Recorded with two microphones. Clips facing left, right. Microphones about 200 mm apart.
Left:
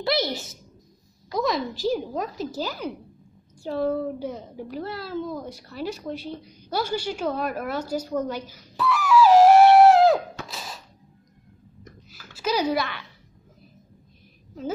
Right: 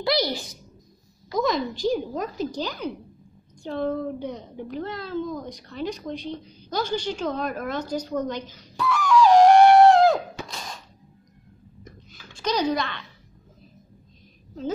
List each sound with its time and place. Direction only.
0.0 s a woman's voice: 25° left (ahead or behind)
1.3 s a woman's voice: centre (ahead or behind)
10.5 s a sound: 5° left (ahead or behind)
12.1 s babbling: 5° left (ahead or behind)